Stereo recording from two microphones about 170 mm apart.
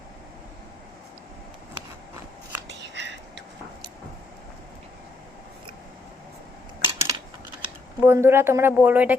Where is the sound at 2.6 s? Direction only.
90° right.